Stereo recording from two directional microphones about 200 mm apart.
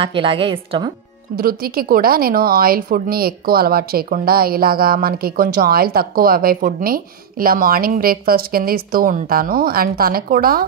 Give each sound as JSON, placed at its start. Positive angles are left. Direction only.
{"t": 0.0, "sound": "a woman's voice", "side_deg": -25}
{"t": 1.3, "sound": "a woman's voice", "side_deg": -50}